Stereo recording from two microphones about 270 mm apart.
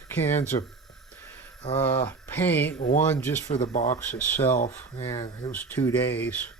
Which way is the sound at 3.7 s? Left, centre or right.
Left.